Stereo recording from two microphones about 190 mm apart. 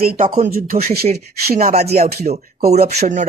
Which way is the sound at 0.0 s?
50° right (ahead or behind).